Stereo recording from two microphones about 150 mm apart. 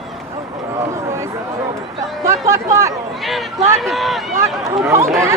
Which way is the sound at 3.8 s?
Centre (ahead or behind).